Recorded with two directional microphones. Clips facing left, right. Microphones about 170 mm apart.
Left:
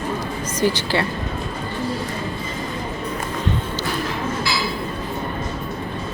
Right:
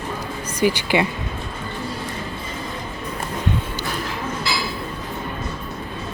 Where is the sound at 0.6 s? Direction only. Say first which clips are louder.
Right 2 dB; 15° right (ahead or behind).